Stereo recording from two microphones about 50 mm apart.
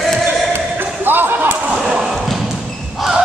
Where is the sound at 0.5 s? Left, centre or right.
Right.